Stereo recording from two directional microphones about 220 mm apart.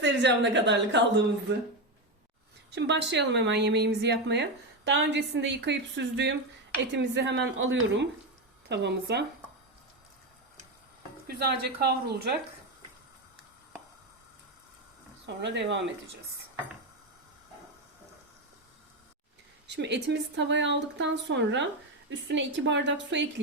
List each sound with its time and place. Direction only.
0.0 s a woman's voice: 50° right (ahead or behind)
2.7 s a woman's voice: 50° right (ahead or behind)
11.3 s a woman's voice: 45° right (ahead or behind)
15.4 s a woman's voice: 55° right (ahead or behind)
19.6 s a woman's voice: 50° right (ahead or behind)